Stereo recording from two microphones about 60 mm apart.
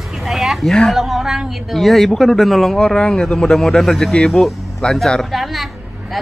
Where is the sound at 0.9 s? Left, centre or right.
Centre.